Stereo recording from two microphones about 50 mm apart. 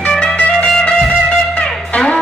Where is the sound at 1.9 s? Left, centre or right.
Left.